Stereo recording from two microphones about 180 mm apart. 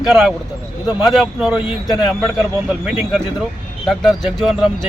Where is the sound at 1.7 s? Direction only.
25° left (ahead or behind).